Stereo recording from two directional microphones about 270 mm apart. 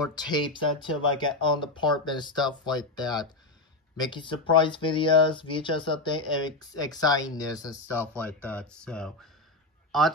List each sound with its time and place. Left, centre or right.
0.1 s speech: centre